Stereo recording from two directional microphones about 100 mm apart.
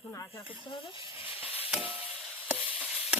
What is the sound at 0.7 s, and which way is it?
Speech, 60° left (ahead or behind).